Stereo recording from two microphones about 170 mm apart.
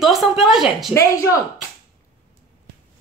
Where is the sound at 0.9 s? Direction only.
20° left (ahead or behind).